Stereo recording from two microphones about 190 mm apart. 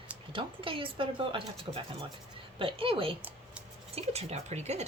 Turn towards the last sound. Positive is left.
turn(degrees=-35)  # may be behind; listen again after turning